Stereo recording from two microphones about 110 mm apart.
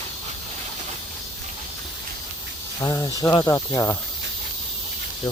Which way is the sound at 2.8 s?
35° left (ahead or behind).